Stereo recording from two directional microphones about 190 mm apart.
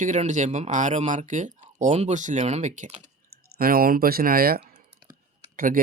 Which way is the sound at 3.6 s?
50° right (ahead or behind).